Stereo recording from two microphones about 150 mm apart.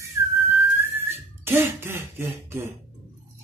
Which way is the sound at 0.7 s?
15° right (ahead or behind).